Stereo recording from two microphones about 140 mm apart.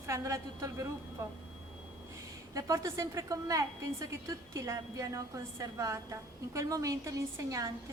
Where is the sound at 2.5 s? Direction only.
25° right (ahead or behind).